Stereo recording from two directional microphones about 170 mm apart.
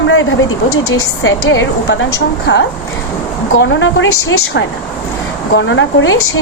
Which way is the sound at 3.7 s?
90° left.